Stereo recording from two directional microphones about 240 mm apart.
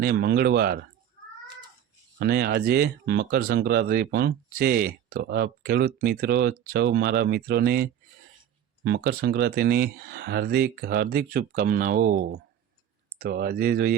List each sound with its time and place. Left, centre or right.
0.0 s speech: right
2.1 s speech: right